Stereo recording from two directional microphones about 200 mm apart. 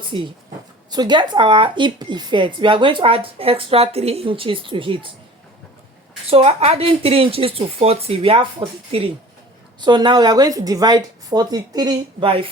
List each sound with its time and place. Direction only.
0.1 s speech: 25° right (ahead or behind)
6.3 s speech: 30° right (ahead or behind)